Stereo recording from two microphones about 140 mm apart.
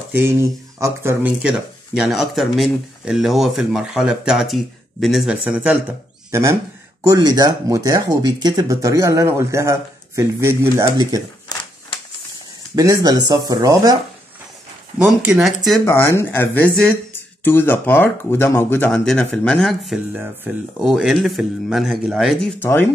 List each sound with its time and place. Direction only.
0.1 s speech: 20° right (ahead or behind)
1.2 s speech: 5° right (ahead or behind)
7.1 s speech: 25° right (ahead or behind)
12.7 s speech: 25° right (ahead or behind)
15.2 s speech: 5° right (ahead or behind)
15.8 s speech: 15° left (ahead or behind)
18.9 s speech: 5° left (ahead or behind)
20.5 s speech: 10° right (ahead or behind)
22.6 s speech: 15° left (ahead or behind)